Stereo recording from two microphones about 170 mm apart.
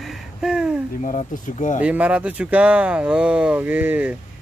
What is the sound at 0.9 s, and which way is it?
Speech, 50° left (ahead or behind).